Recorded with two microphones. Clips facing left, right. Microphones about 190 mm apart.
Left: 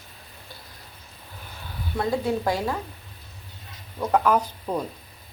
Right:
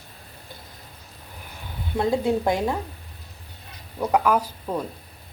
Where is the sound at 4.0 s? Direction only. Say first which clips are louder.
Even; 10° right (ahead or behind).